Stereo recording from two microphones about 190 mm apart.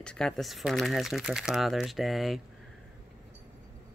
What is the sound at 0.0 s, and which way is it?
Speech, 5° left (ahead or behind).